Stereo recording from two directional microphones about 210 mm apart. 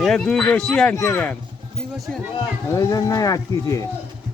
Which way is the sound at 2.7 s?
15° left (ahead or behind).